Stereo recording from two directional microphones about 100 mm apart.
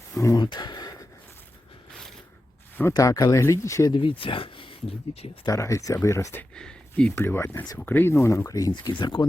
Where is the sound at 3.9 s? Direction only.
60° left (ahead or behind).